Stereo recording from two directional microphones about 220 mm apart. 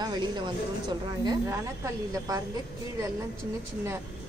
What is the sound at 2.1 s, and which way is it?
Speech, 15° right (ahead or behind).